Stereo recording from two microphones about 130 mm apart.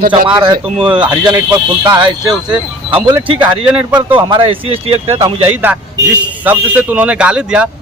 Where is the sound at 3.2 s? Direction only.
40° right (ahead or behind).